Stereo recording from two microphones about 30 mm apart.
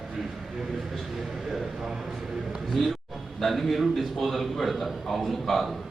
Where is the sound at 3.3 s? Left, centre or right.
Centre.